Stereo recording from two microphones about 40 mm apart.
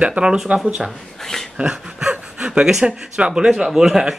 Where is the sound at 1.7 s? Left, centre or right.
Right.